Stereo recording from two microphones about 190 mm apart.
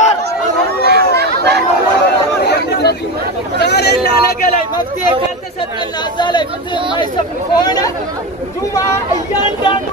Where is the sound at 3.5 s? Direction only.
60° left (ahead or behind).